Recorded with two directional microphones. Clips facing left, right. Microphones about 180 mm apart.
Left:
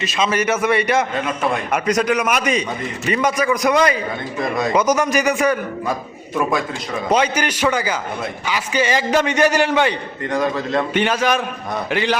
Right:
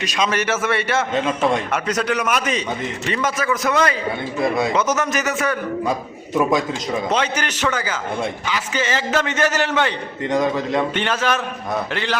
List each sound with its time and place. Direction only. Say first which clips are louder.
0.0 s a man's voice: left 2 dB; 5° left (ahead or behind)
1.1 s a man's voice: right 2 dB; 25° right (ahead or behind)
1.7 s a man's voice: left 3 dB; 10° left (ahead or behind)
4.4 s a man's voice: right 1 dB; 5° right (ahead or behind)
4.7 s a man's voice: left 3 dB; 10° left (ahead or behind)
7.1 s a man's voice: left 8 dB; 10° left (ahead or behind)
10.2 s a man's voice: right 1 dB; 20° right (ahead or behind)
10.9 s a man's voice: left 3 dB; 10° left (ahead or behind)